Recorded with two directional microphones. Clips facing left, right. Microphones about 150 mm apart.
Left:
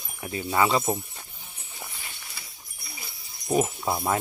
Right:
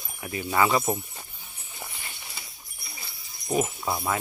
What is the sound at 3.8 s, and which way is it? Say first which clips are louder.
Speech: left 2 dB; 10° left (ahead or behind).